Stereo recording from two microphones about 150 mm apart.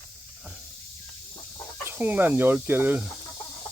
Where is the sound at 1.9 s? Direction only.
10° right (ahead or behind).